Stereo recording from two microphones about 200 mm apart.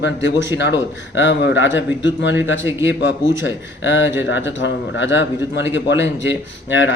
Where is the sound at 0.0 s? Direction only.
70° left (ahead or behind).